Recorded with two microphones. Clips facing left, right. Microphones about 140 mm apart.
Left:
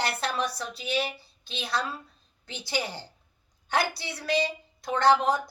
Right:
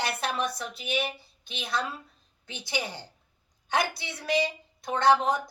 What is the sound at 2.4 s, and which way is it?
A woman's voice, 20° right (ahead or behind).